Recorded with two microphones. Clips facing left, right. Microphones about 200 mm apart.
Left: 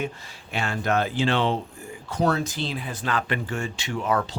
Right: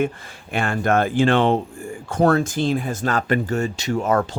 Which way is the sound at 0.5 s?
50° right (ahead or behind).